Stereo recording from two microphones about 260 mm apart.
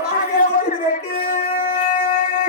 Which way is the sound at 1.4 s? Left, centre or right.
Left.